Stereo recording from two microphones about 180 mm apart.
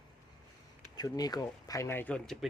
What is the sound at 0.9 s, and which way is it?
Speech, 20° left (ahead or behind).